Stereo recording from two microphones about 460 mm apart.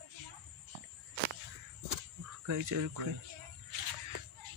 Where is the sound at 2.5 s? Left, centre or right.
Right.